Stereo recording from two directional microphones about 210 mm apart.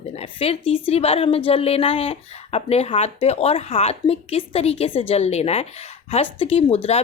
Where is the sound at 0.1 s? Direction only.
30° left (ahead or behind).